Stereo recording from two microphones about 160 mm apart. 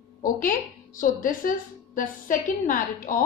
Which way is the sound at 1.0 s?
55° left (ahead or behind).